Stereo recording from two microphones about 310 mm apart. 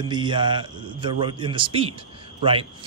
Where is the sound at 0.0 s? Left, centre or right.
Centre.